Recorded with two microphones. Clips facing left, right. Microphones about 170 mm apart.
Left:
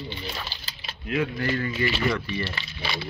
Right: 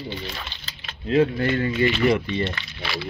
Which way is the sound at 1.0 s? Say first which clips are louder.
Right 7 dB; 30° right (ahead or behind).